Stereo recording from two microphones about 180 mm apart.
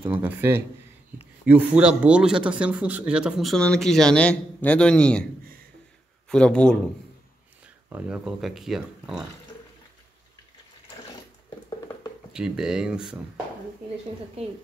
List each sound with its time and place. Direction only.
0.0 s speech: 10° right (ahead or behind); by 5.2 s 5° left (ahead or behind)
6.2 s speech: 5° left (ahead or behind)
7.6 s speech: 5° right (ahead or behind)
12.3 s speech: 5° right (ahead or behind)
14.4 s a woman's voice: 35° right (ahead or behind)